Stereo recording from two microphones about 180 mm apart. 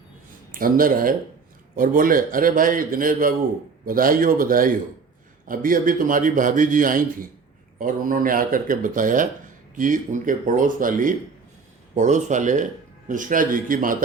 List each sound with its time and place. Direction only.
0.5 s a man's voice: 50° right (ahead or behind)